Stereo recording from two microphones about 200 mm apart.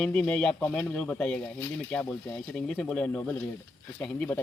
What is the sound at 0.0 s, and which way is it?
Speech, 5° left (ahead or behind).